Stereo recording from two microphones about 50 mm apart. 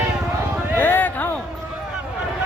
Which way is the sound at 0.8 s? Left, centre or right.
Left.